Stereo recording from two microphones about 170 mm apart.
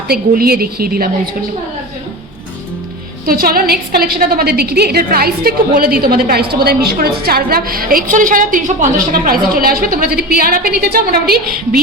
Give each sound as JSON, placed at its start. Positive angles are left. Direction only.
{"t": 0.1, "sound": "a woman's voice", "side_deg": -65}
{"t": 3.2, "sound": "a woman's voice", "side_deg": -60}